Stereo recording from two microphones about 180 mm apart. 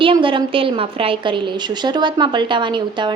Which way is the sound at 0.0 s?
30° right (ahead or behind).